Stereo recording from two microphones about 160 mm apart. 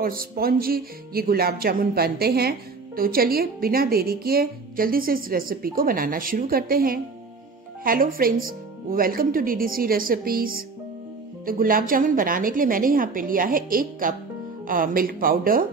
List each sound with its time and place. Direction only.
0.0 s music: 65° right (ahead or behind)
3.0 s a woman's voice: 65° right (ahead or behind)